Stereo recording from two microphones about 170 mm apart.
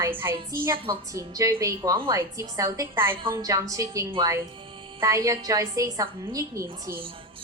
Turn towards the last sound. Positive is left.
turn(degrees=-20)  # may be behind; listen again after turning